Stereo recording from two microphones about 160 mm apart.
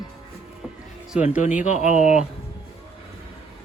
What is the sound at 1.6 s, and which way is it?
Speech, 50° left (ahead or behind).